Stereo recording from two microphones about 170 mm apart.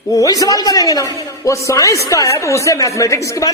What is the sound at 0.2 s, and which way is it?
A man's voice, 20° left (ahead or behind).